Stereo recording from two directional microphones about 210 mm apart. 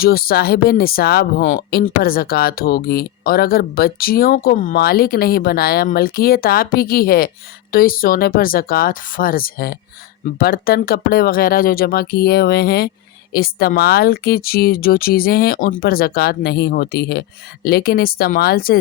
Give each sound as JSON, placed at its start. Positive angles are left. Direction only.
{"t": 0.0, "sound": "speech", "side_deg": 45}